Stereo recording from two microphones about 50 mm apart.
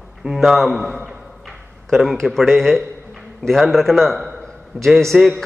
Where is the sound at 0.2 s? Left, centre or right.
Centre.